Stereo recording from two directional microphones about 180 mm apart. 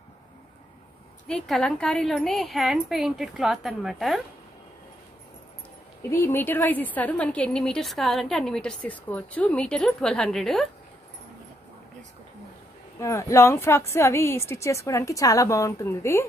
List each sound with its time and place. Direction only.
1.2 s a woman's voice: 5° left (ahead or behind)
6.0 s a woman's voice: 15° left (ahead or behind)
13.0 s speech: 15° left (ahead or behind)